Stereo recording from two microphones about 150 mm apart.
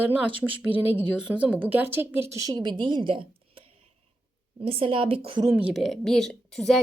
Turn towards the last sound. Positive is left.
turn(degrees=0)  # may be behind; listen again after turning